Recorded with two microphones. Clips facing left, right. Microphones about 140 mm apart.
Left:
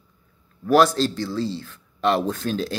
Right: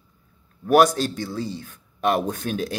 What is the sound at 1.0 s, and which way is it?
Speech, 55° right (ahead or behind).